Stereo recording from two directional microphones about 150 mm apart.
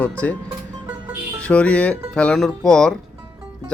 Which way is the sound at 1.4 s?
10° left (ahead or behind).